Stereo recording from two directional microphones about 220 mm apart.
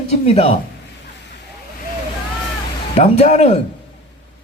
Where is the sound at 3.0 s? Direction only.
30° left (ahead or behind).